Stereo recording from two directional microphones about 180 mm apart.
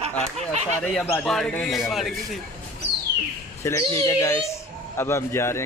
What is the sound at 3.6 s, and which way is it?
Speech, 15° left (ahead or behind).